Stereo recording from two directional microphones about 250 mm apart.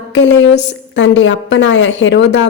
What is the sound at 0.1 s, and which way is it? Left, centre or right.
A woman's voice, left.